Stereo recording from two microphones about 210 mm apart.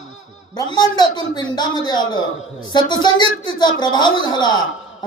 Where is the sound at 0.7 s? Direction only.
20° left (ahead or behind).